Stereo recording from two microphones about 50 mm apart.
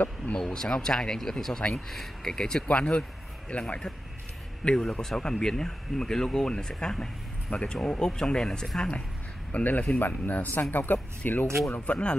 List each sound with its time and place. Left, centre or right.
0.5 s a man's voice: centre
9.5 s speech: left
11.8 s speech: left